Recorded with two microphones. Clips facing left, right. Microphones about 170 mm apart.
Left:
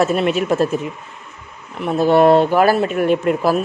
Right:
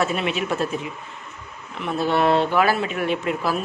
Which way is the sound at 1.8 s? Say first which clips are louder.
Left 8 dB; 45° left (ahead or behind).